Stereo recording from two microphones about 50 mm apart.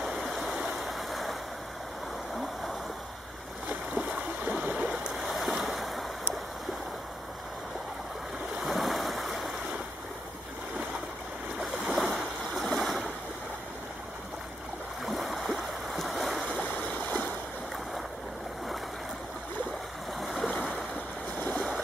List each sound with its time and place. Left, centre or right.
0.3 s stream: centre
3.9 s a sound: right
5.1 s boat: centre
8.6 s stream: centre
11.9 s a sound: centre
12.7 s ocean: centre
15.0 s stream: centre
20.2 s stream: centre
21.5 s boat: centre